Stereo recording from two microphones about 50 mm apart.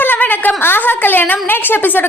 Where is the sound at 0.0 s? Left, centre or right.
Left.